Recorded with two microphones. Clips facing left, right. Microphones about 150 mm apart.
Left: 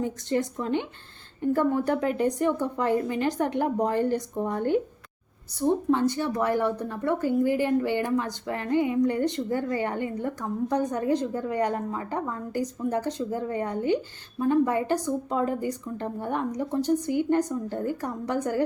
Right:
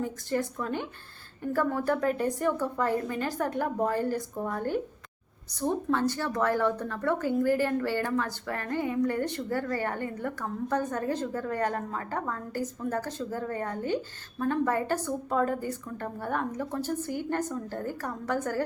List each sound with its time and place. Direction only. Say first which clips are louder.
0.0 s a woman's voice: left 3 dB; 20° left (ahead or behind)